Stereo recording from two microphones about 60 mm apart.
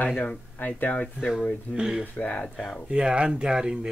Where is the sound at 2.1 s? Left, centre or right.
Left.